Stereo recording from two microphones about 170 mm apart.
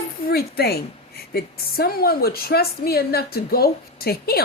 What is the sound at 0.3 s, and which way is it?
A woman's voice, 65° left (ahead or behind).